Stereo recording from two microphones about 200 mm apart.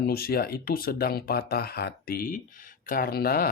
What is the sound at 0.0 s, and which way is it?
Speech, 50° left (ahead or behind).